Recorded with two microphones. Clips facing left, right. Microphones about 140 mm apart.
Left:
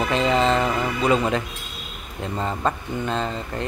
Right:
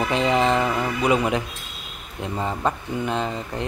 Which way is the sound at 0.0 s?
15° right (ahead or behind).